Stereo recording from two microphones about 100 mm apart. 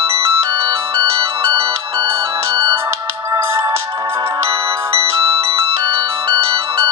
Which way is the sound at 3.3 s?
30° right (ahead or behind).